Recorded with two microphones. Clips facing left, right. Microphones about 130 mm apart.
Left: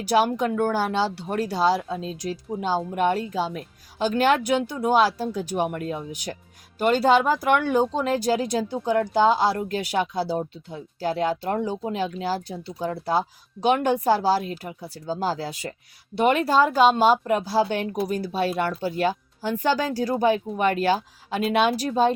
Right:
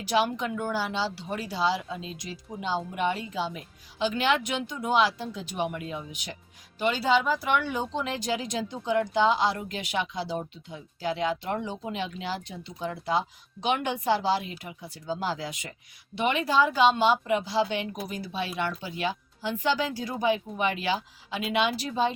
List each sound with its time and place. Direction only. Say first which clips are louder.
0.2 s speech: left 6 dB; 45° left (ahead or behind)